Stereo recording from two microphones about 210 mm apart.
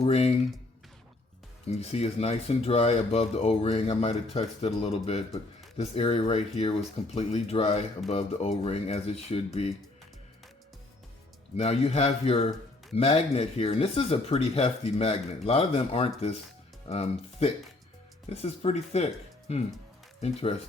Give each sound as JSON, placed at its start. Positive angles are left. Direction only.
{"t": 0.0, "sound": "speech", "side_deg": 30}
{"t": 1.6, "sound": "speech", "side_deg": 30}
{"t": 11.5, "sound": "speech", "side_deg": 30}